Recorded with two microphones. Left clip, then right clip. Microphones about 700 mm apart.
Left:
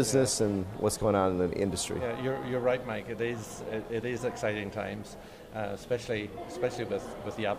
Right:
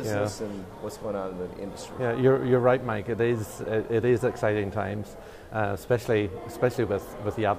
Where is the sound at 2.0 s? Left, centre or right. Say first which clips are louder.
Right 13 dB; right.